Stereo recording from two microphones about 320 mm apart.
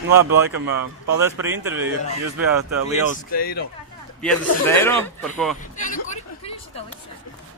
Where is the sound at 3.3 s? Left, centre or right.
Left.